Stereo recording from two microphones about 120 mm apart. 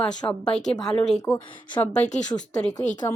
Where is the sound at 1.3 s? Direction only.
15° left (ahead or behind).